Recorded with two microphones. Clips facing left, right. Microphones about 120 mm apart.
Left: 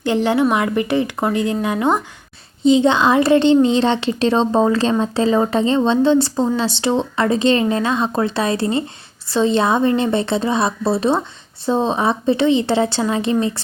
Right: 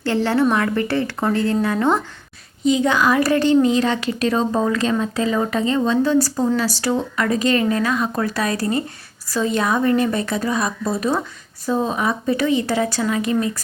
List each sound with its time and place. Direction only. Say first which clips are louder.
0.0 s a woman's voice: left 2 dB; 15° left (ahead or behind)
2.6 s a woman's voice: left 4 dB; 25° left (ahead or behind)